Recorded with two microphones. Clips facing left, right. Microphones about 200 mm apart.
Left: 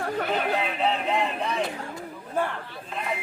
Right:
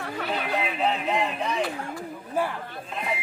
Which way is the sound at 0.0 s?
45° left (ahead or behind).